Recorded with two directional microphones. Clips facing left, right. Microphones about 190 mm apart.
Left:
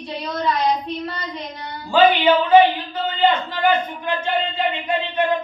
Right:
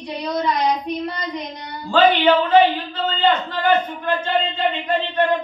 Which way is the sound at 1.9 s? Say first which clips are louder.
Even; 10° left (ahead or behind).